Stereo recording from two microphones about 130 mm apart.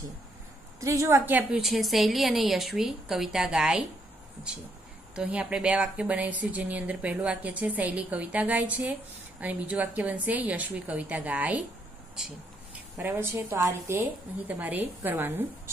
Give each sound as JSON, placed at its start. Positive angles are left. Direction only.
{"t": 0.7, "sound": "a woman's voice", "side_deg": -25}
{"t": 1.6, "sound": "a woman's voice", "side_deg": 0}
{"t": 5.1, "sound": "a woman's voice", "side_deg": -10}
{"t": 12.9, "sound": "a woman's voice", "side_deg": -15}
{"t": 14.5, "sound": "speech", "side_deg": -10}